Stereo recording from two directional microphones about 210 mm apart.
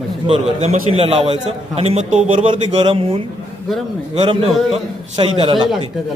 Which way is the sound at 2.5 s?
25° right (ahead or behind).